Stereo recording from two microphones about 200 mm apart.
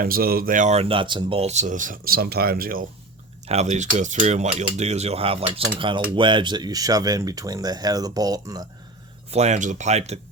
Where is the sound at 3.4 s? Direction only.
35° right (ahead or behind).